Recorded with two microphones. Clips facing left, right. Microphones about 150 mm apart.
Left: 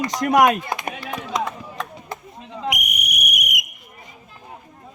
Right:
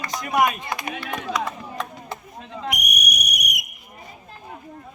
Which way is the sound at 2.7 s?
90° left.